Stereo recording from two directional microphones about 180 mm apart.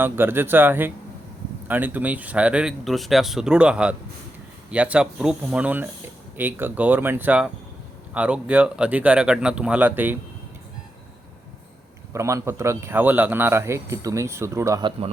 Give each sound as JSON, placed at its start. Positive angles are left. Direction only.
{"t": 0.0, "sound": "a man's voice", "side_deg": -10}
{"t": 12.1, "sound": "a man's voice", "side_deg": -15}